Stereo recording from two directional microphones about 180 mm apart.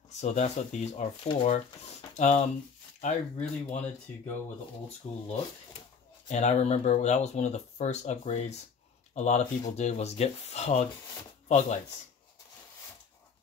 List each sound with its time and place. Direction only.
0.2 s speech: 40° left (ahead or behind)
6.2 s speech: 40° left (ahead or behind)